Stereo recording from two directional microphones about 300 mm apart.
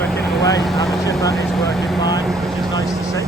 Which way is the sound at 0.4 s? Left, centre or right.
Centre.